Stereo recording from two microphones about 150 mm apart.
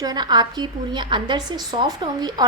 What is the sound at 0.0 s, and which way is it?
A woman's voice, 25° right (ahead or behind).